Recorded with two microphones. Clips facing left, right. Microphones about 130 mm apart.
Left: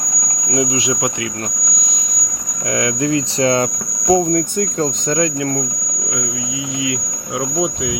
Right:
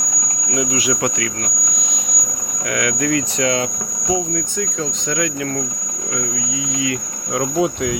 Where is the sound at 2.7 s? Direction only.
30° left (ahead or behind).